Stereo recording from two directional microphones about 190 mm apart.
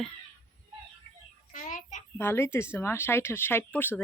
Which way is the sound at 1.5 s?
40° left (ahead or behind).